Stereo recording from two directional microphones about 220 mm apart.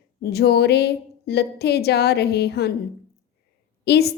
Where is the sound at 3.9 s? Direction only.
45° left (ahead or behind).